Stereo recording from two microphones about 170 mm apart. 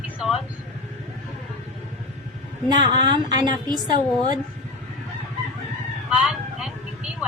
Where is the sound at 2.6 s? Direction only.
25° right (ahead or behind).